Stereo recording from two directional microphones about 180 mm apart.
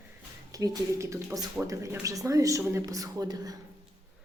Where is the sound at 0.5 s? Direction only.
20° right (ahead or behind).